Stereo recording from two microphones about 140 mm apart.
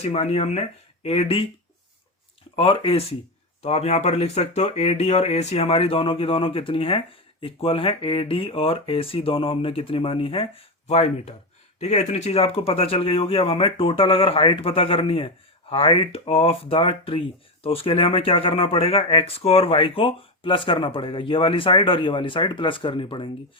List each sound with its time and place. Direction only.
0.0 s speech: 50° left (ahead or behind)
2.6 s speech: 40° left (ahead or behind)